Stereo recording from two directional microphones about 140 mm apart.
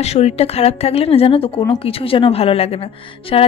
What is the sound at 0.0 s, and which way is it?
A woman's voice, 50° left (ahead or behind).